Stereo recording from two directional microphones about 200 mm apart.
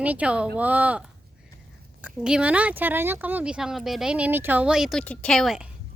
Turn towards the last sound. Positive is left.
turn(degrees=0)  # may be behind; listen again after turning